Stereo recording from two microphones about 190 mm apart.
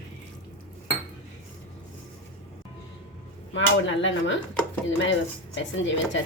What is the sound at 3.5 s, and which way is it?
Speech, 75° left (ahead or behind).